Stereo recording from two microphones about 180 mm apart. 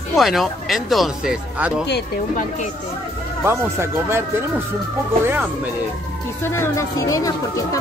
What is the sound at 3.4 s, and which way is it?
Speech, 15° right (ahead or behind).